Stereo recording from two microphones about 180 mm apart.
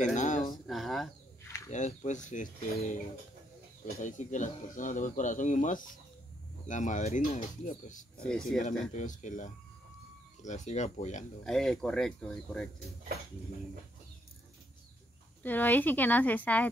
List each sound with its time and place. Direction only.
0.0 s a sound: 40° left (ahead or behind)
0.7 s speech: centre (ahead or behind)
1.7 s speech: 40° left (ahead or behind)
4.0 s speech: 45° left (ahead or behind)
8.2 s speech: 5° left (ahead or behind)
8.9 s speech: 45° left (ahead or behind)
11.4 s speech: 5° left (ahead or behind)
15.4 s speech: 10° left (ahead or behind)